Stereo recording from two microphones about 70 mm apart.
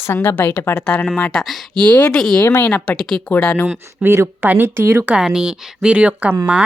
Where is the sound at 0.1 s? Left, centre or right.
Left.